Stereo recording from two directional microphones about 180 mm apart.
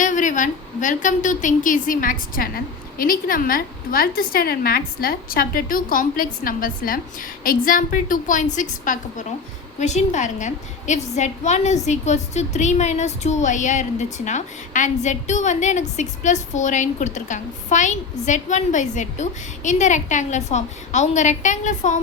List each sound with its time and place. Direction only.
0.0 s a woman's voice: 45° left (ahead or behind)